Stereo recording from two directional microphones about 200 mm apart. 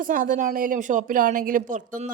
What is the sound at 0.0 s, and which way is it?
A woman's voice, 40° right (ahead or behind).